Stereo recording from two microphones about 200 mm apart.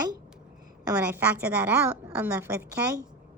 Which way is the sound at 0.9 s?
10° right (ahead or behind).